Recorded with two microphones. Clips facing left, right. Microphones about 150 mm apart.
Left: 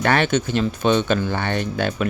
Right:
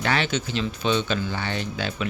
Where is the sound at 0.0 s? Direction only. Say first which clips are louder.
Left 6 dB; 55° left (ahead or behind).